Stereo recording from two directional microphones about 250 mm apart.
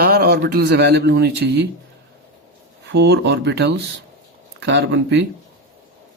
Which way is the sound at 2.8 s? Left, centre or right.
Right.